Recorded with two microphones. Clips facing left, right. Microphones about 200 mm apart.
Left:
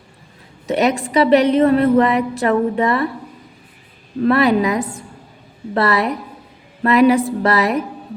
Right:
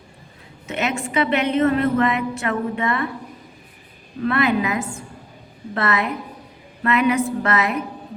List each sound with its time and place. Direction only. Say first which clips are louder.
0.7 s a woman's voice: left 7 dB; 35° left (ahead or behind)
4.2 s a woman's voice: left 6 dB; 35° left (ahead or behind)